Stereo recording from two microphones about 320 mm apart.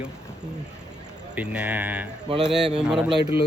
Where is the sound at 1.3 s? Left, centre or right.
Centre.